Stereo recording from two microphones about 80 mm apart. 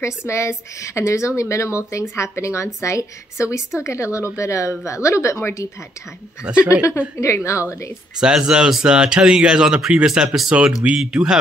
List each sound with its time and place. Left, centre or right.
0.3 s speech: left
6.7 s speech: left
8.2 s speech: centre